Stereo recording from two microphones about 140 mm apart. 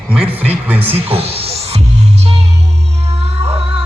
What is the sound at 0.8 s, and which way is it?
Music, 45° right (ahead or behind).